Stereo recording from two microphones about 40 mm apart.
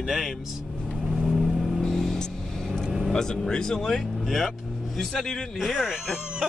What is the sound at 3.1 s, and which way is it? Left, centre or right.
Speech, centre.